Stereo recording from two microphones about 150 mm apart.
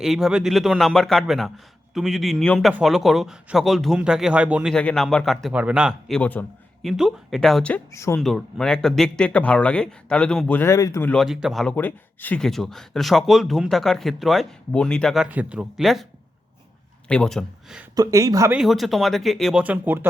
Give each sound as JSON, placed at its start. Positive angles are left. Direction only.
{"t": 0.0, "sound": "speech", "side_deg": 0}
{"t": 4.7, "sound": "speech", "side_deg": 5}
{"t": 6.1, "sound": "speech", "side_deg": 10}
{"t": 6.8, "sound": "speech", "side_deg": 0}
{"t": 7.9, "sound": "speech", "side_deg": 20}
{"t": 8.2, "sound": "speech", "side_deg": 0}
{"t": 11.0, "sound": "speech", "side_deg": 5}
{"t": 11.7, "sound": "speech", "side_deg": 10}
{"t": 17.1, "sound": "speech", "side_deg": 5}
{"t": 17.9, "sound": "speech", "side_deg": -25}
{"t": 18.5, "sound": "speech", "side_deg": 0}
{"t": 19.6, "sound": "speech", "side_deg": -10}